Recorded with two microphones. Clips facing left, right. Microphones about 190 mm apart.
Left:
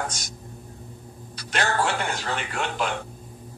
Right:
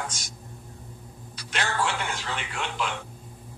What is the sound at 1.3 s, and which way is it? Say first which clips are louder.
Speech: left 4 dB; 45° left (ahead or behind).